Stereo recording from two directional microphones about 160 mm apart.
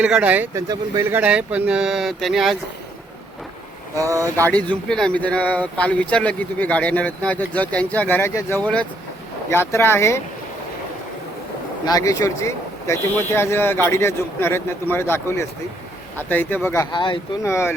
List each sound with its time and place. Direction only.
0.0 s speech: 10° right (ahead or behind)
0.5 s speech: 20° right (ahead or behind)
1.1 s speech: 10° right (ahead or behind)
3.9 s speech: 20° right (ahead or behind)
4.4 s speech: 10° left (ahead or behind)
11.9 s speech: 25° left (ahead or behind)
16.9 s speech: 30° left (ahead or behind)
17.4 s speech: 15° left (ahead or behind)